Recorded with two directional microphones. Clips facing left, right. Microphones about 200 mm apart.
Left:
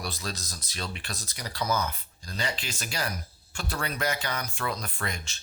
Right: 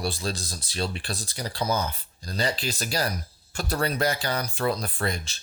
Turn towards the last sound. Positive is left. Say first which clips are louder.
# right 6 dB
turn(degrees=-35)  # may be behind; listen again after turning